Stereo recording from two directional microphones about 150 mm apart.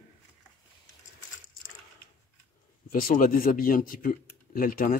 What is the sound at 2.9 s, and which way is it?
Speech, 70° left (ahead or behind).